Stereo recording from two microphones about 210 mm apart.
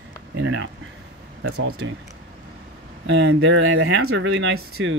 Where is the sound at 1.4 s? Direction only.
80° right.